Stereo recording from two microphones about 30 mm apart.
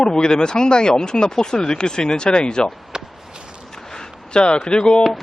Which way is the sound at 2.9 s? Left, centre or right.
Right.